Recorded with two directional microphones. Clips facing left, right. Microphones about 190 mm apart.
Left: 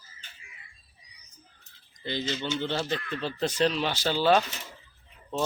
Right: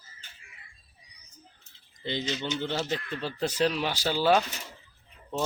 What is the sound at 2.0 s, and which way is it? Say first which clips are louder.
Speech: even; 20° right (ahead or behind).